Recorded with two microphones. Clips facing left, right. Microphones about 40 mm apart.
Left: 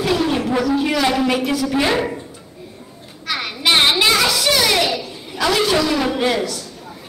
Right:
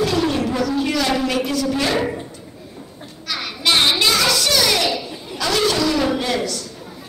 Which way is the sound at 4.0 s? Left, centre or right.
Centre.